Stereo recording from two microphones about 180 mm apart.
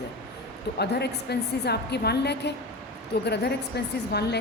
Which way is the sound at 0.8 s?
65° left (ahead or behind).